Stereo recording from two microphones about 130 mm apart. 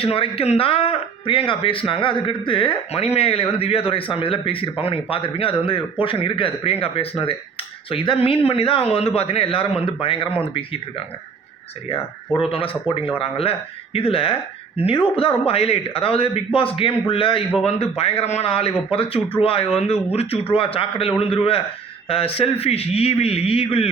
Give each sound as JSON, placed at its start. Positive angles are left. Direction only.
{"t": 0.0, "sound": "speech", "side_deg": 45}
{"t": 12.5, "sound": "speech", "side_deg": 45}